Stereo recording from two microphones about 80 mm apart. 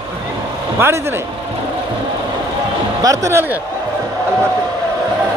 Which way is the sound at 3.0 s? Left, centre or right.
Right.